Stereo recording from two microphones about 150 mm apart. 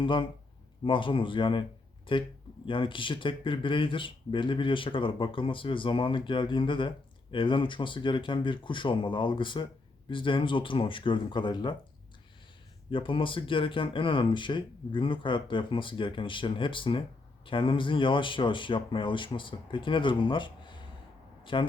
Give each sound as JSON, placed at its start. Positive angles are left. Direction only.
{"t": 0.0, "sound": "speech", "side_deg": 35}
{"t": 12.9, "sound": "a man's voice", "side_deg": 35}